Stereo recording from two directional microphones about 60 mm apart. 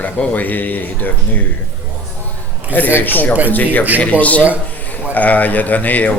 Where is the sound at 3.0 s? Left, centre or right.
Left.